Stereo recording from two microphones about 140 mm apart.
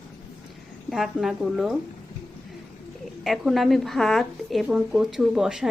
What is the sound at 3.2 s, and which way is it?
Speech, centre (ahead or behind).